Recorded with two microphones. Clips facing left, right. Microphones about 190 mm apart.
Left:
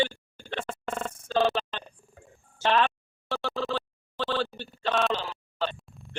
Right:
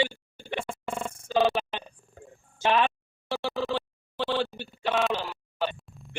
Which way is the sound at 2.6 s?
15° right (ahead or behind).